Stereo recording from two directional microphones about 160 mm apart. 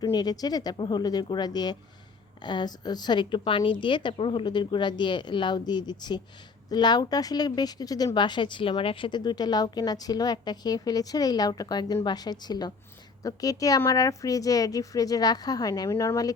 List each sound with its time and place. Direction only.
0.0 s speech: 25° left (ahead or behind)